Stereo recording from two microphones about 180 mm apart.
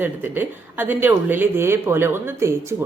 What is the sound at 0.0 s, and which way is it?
A woman's voice, 10° right (ahead or behind).